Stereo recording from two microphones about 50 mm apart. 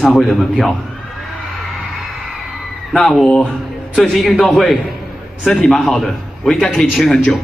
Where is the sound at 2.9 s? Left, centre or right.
Centre.